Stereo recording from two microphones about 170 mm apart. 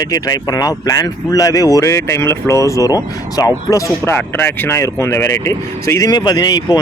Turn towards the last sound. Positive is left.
turn(degrees=20)  # may be behind; listen again after turning